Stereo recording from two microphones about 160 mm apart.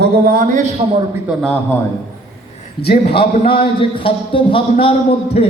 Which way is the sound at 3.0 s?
35° left (ahead or behind).